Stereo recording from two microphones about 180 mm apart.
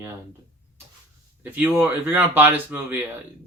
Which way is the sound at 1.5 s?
10° right (ahead or behind).